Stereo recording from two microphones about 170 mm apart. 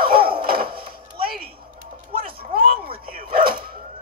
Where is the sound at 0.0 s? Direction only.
60° right (ahead or behind).